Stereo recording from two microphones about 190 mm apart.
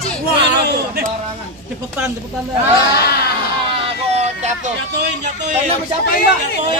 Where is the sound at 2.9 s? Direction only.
55° left (ahead or behind).